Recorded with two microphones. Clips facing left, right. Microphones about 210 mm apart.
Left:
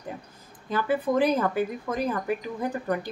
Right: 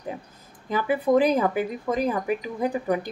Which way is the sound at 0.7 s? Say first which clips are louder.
Right 3 dB; 15° right (ahead or behind).